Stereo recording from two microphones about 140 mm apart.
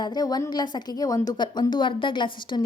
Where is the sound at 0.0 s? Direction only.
30° left (ahead or behind).